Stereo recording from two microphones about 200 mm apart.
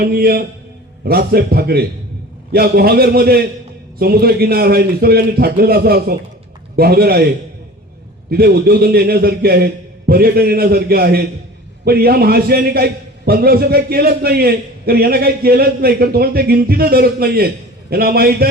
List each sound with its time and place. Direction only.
0.0 s a man's voice: 50° right (ahead or behind)
8.3 s a man's voice: 50° right (ahead or behind)